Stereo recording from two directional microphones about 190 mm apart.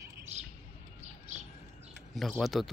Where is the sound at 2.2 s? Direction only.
Centre (ahead or behind).